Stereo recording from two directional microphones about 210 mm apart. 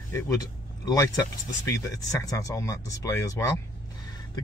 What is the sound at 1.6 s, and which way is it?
Speech, 15° left (ahead or behind).